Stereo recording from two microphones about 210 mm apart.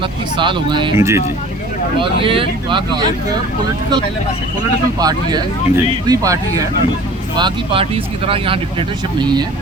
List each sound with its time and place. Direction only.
0.3 s speech: 20° right (ahead or behind)
2.0 s speech: 25° right (ahead or behind)
4.9 s speech: 20° right (ahead or behind)